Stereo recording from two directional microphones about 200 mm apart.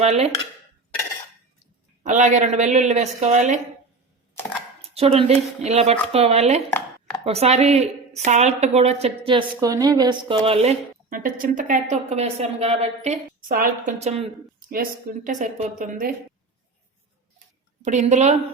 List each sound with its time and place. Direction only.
0.0 s a woman's voice: 30° right (ahead or behind)
2.0 s a woman's voice: 35° right (ahead or behind)
4.8 s a sound: 30° right (ahead or behind)
5.6 s a woman's voice: 30° right (ahead or behind)
17.8 s a woman's voice: 35° right (ahead or behind)